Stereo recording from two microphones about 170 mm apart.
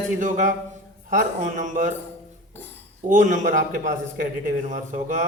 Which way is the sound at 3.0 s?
50° right (ahead or behind).